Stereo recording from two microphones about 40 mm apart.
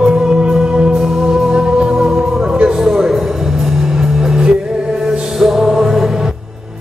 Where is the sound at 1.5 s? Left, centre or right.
Right.